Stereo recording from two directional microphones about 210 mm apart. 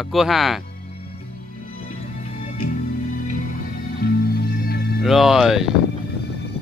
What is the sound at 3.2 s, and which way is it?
Music, 40° left (ahead or behind).